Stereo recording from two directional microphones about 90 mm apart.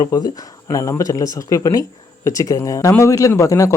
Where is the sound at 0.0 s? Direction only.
45° left (ahead or behind).